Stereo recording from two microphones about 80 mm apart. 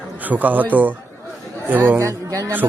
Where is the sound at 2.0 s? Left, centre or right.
Right.